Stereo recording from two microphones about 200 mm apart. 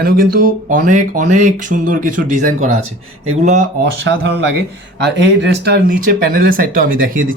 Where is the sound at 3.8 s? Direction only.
60° right (ahead or behind).